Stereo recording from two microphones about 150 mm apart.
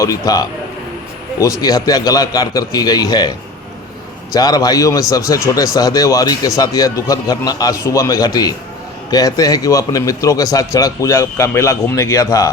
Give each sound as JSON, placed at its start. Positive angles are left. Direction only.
{"t": 0.0, "sound": "a man's voice", "side_deg": 25}